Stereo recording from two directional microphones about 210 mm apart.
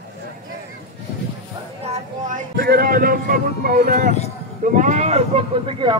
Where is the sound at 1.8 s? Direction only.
35° right (ahead or behind).